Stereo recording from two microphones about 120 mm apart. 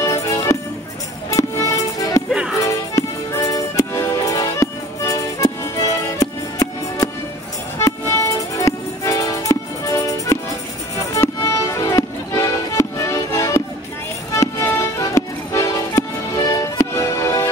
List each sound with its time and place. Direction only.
0.0 s music: 30° left (ahead or behind)